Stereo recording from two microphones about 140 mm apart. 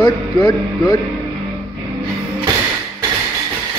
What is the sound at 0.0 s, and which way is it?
Speech, 30° left (ahead or behind).